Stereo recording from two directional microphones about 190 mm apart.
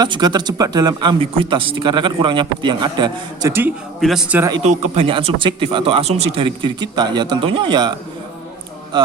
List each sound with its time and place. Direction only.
0.0 s speech: 20° right (ahead or behind)
4.0 s a man's voice: 5° right (ahead or behind)
5.0 s speech: 30° right (ahead or behind)
8.9 s speech: 25° right (ahead or behind)